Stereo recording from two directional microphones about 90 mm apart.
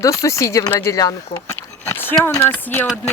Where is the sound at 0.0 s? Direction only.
35° left (ahead or behind).